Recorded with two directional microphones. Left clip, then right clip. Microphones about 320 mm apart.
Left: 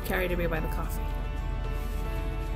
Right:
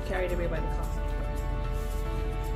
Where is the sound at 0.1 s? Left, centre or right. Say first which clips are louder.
Left 2 dB; left.